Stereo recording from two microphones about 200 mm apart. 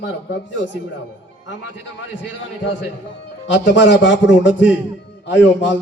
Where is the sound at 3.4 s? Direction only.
65° left (ahead or behind).